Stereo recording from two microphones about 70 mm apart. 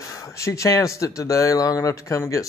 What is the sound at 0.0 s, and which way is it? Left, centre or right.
Speech, left.